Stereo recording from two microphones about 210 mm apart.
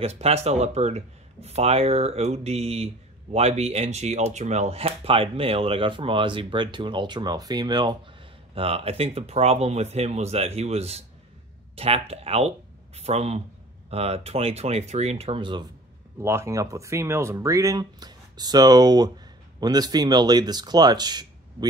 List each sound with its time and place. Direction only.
0.0 s speech: 30° right (ahead or behind)
16.2 s speech: 10° right (ahead or behind)